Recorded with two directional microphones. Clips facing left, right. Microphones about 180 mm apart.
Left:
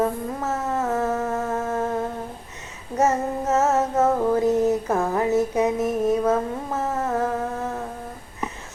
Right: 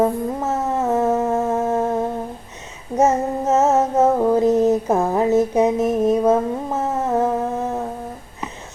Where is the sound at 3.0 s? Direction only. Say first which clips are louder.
Right 4 dB; 20° right (ahead or behind).